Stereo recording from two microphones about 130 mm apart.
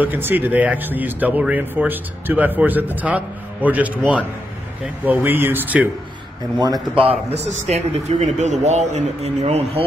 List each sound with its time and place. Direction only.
0.0 s speech: 15° right (ahead or behind)
7.0 s a man's voice: 50° right (ahead or behind)